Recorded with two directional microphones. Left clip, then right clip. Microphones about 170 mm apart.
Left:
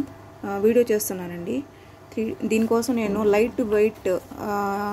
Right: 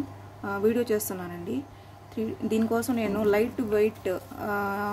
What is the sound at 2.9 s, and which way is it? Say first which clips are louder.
A woman's voice: left 4 dB; 10° left (ahead or behind).